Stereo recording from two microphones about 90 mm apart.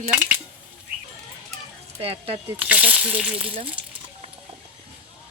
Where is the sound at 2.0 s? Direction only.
90° right.